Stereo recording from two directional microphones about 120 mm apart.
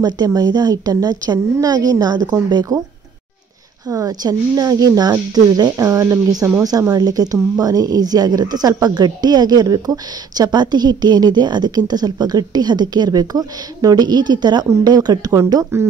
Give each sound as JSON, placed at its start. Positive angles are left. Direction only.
{"t": 0.0, "sound": "a woman's voice", "side_deg": -35}
{"t": 3.9, "sound": "a woman's voice", "side_deg": -30}